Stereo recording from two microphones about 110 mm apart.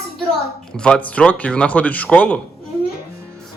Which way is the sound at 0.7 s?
10° left (ahead or behind).